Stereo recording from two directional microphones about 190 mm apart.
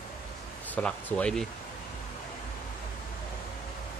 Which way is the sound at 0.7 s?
5° left (ahead or behind).